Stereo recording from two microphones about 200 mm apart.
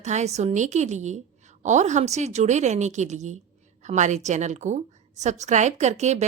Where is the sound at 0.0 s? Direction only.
35° right (ahead or behind).